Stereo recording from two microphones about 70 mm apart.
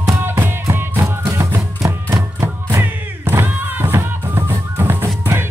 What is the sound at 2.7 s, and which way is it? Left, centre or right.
Music, right.